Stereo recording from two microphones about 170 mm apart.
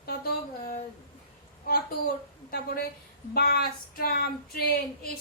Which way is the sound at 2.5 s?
65° left (ahead or behind).